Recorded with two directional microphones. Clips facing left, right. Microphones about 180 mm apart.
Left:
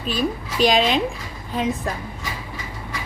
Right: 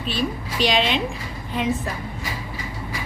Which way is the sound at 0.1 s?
45° left (ahead or behind).